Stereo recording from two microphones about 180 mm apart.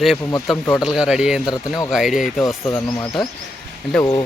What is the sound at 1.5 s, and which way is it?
Speech, 20° left (ahead or behind).